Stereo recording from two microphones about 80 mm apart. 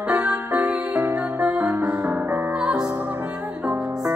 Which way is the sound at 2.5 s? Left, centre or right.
Centre.